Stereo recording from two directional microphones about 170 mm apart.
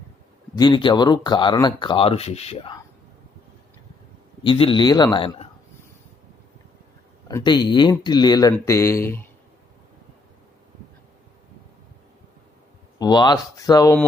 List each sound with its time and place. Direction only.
0.5 s speech: 25° left (ahead or behind)
4.4 s speech: 30° left (ahead or behind)
7.3 s speech: 25° left (ahead or behind)
13.0 s speech: 25° left (ahead or behind)